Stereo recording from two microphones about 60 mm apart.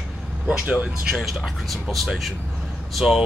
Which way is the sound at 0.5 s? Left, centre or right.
Right.